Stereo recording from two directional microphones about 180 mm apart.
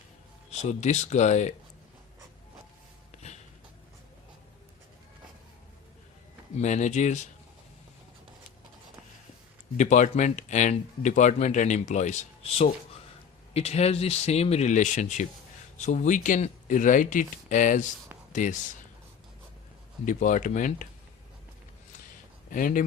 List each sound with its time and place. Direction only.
0.5 s speech: 40° left (ahead or behind)
6.6 s speech: 40° left (ahead or behind)
9.7 s speech: 45° left (ahead or behind)
20.1 s speech: 45° left (ahead or behind)
22.4 s speech: 50° left (ahead or behind)